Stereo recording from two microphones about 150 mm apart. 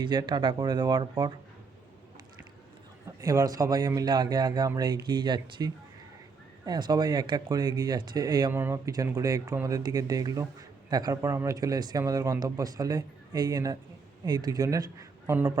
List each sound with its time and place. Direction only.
0.0 s speech: 30° right (ahead or behind)
3.2 s speech: 25° right (ahead or behind)
8.5 s a man's voice: 15° right (ahead or behind)